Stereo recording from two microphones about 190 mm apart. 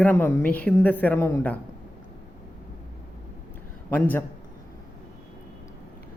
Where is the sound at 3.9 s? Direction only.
10° left (ahead or behind).